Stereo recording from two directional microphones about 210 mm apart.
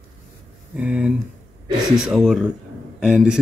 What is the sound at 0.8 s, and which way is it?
Speech, 5° right (ahead or behind).